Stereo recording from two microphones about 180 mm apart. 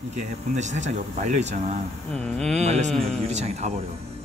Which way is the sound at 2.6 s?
35° right (ahead or behind).